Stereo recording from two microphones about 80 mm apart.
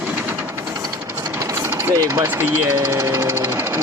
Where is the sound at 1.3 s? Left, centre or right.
Right.